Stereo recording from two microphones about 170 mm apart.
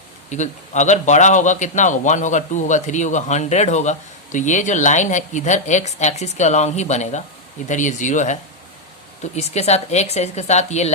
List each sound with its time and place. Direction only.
0.3 s a man's voice: 45° left (ahead or behind)